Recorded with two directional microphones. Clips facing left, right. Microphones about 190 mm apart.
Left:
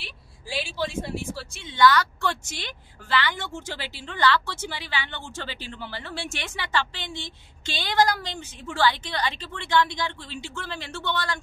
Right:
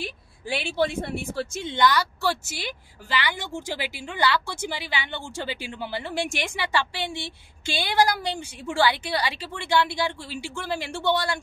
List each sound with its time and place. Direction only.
0.5 s speech: 60° right (ahead or behind)
1.8 s speech: 10° right (ahead or behind)